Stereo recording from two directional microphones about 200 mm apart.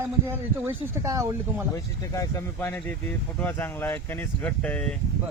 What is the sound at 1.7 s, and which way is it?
Speech, 15° left (ahead or behind).